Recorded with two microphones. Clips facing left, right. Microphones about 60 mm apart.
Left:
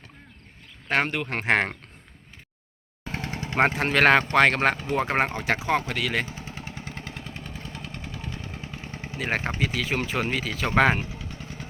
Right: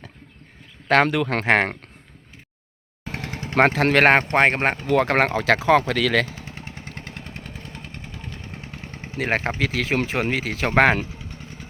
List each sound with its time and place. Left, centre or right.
0.9 s speech: right
1.5 s speech: right
3.5 s speech: right
4.0 s speech: right
4.9 s speech: right
6.9 s vehicle: right
7.6 s vehicle: right
8.2 s vehicle: centre
8.5 s vehicle: right
8.8 s vehicle: centre
9.1 s speech: right
11.3 s vehicle: centre